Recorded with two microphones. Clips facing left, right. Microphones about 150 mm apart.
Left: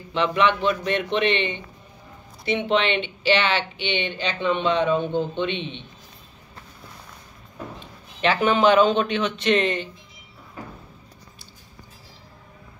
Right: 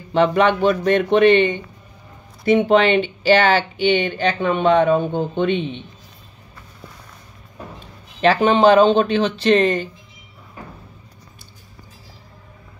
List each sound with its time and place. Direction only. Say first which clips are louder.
0.1 s speech: right 5 dB; 45° right (ahead or behind)
7.8 s a man's voice: right 7 dB; 35° right (ahead or behind)